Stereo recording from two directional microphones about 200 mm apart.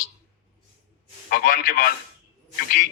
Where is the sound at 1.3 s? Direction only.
45° left (ahead or behind).